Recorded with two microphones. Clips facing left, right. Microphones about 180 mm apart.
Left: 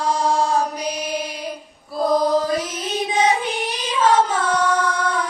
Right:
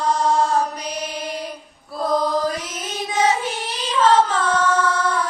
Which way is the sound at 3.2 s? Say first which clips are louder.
Even; 15° left (ahead or behind).